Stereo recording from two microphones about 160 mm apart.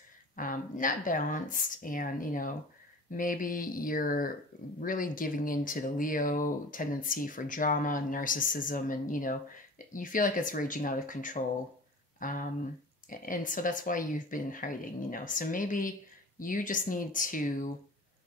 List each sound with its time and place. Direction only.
0.4 s speech: 60° left (ahead or behind)